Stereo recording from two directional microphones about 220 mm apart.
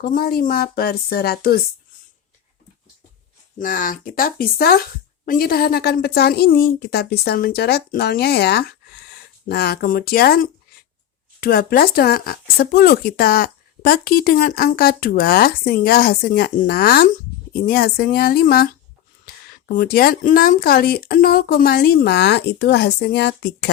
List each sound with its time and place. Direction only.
0.0 s speech: 40° left (ahead or behind)
3.6 s speech: 40° left (ahead or behind)